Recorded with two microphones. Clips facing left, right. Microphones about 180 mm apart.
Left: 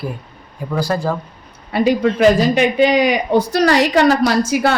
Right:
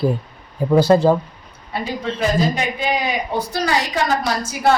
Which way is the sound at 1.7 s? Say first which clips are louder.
Left 10 dB; 80° left.